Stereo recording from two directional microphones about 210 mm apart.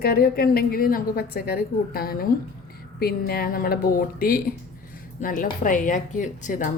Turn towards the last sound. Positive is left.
turn(degrees=35)  # may be behind; listen again after turning